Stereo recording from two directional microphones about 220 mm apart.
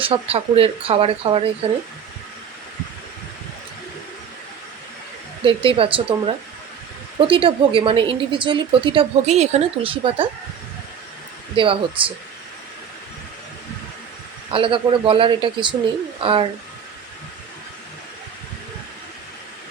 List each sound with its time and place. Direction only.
0.0 s a woman's voice: 25° right (ahead or behind)
5.5 s a woman's voice: 25° right (ahead or behind)
11.5 s a woman's voice: 25° right (ahead or behind)
14.5 s a woman's voice: 25° right (ahead or behind)